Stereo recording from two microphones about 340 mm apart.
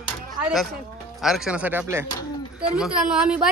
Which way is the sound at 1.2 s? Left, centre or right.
Centre.